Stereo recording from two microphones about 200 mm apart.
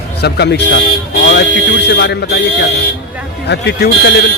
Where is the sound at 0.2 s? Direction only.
55° left (ahead or behind).